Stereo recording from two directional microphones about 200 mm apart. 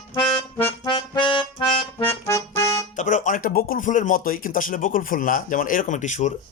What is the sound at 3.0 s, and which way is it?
Speech, 40° left (ahead or behind).